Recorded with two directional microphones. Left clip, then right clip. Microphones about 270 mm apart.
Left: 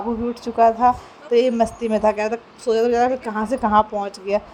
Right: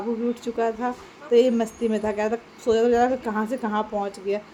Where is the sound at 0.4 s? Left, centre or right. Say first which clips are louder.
Left 13 dB; centre.